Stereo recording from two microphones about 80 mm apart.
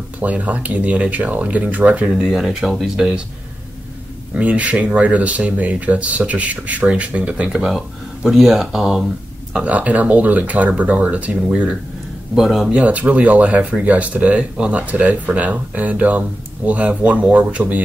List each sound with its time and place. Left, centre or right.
0.2 s speech: centre
2.0 s speech: centre
4.4 s speech: centre
9.7 s speech: centre
12.4 s speech: centre
12.7 s speech: centre